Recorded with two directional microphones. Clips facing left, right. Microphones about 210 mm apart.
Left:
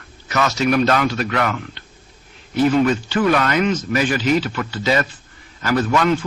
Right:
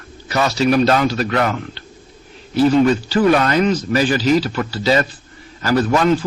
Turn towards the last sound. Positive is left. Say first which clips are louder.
# right 2 dB
turn(degrees=-35)  # may be behind; listen again after turning